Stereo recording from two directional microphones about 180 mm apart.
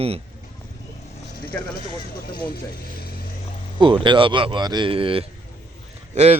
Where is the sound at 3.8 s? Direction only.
25° right (ahead or behind).